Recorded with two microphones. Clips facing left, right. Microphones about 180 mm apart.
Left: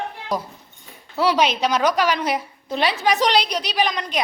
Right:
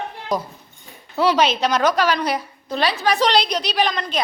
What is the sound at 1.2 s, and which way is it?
A woman's voice, 10° left (ahead or behind).